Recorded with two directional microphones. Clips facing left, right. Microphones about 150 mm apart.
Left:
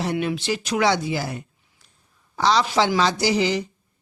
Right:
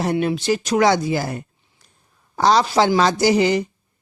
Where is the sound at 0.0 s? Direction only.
40° right (ahead or behind).